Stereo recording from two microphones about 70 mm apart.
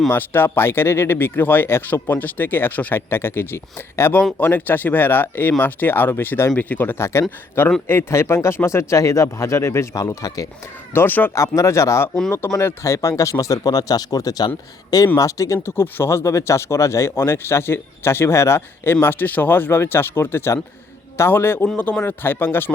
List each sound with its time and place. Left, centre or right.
0.1 s speech: left
7.0 s speech: left
10.2 s speech: left
10.9 s speech: left
11.3 s speech: left
15.2 s speech: left
15.7 s speech: left
19.0 s speech: left
21.8 s speech: left